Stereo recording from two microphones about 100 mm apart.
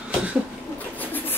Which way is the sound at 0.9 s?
20° left (ahead or behind).